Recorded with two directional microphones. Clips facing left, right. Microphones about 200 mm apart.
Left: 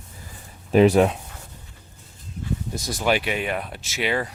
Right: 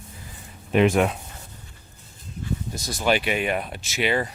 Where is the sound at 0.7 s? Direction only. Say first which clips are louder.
Left 3 dB; 35° left (ahead or behind).